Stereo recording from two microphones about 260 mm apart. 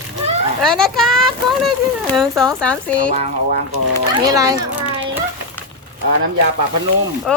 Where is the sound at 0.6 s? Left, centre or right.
Centre.